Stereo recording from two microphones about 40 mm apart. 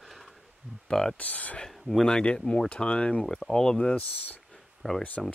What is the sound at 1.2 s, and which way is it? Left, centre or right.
Speech, left.